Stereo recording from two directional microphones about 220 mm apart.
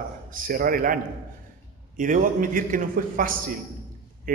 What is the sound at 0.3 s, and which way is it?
A man's voice, 40° right (ahead or behind).